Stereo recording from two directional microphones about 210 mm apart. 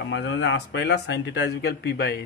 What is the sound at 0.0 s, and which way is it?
Speech, 55° left (ahead or behind).